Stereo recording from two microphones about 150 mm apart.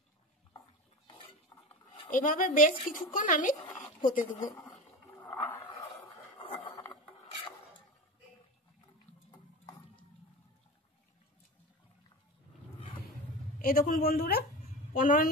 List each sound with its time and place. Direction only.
1.0 s cutlery: 30° left (ahead or behind)
2.0 s speech: 60° left (ahead or behind)
5.2 s a sound: 15° left (ahead or behind)
13.6 s a woman's voice: 75° left (ahead or behind); by 14.4 s 90° left
14.9 s a woman's voice: 70° left (ahead or behind)